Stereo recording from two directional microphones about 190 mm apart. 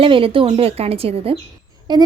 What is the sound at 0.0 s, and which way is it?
A woman's voice, 30° right (ahead or behind).